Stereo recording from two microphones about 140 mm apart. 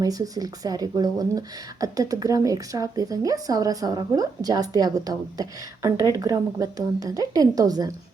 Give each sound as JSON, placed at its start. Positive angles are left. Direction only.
{"t": 0.0, "sound": "speech", "side_deg": -25}